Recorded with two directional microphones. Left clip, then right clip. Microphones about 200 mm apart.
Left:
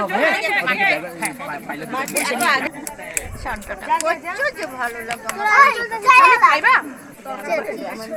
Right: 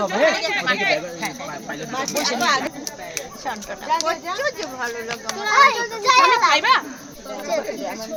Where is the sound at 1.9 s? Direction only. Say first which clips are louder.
Left 1 dB; 40° left (ahead or behind).